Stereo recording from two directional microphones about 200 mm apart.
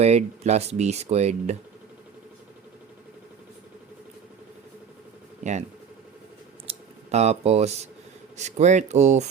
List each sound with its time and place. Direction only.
0.0 s speech: 35° right (ahead or behind)
5.4 s speech: 35° right (ahead or behind)
6.7 s speech: 35° right (ahead or behind)